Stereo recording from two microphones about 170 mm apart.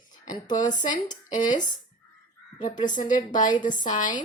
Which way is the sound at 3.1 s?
50° left (ahead or behind).